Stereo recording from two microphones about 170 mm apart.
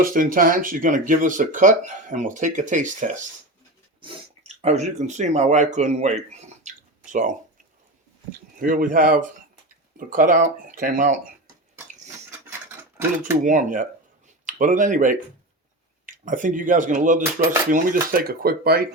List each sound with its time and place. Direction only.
0.0 s speech: 55° right (ahead or behind)
8.5 s speech: 50° right (ahead or behind)
13.4 s speech: 50° right (ahead or behind)